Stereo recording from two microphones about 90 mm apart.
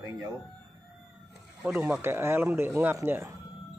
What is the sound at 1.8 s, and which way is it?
Speech, 20° right (ahead or behind).